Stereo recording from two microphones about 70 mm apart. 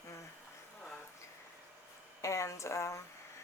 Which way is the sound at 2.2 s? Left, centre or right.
Left.